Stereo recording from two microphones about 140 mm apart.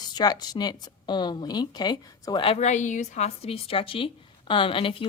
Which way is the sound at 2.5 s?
55° left (ahead or behind).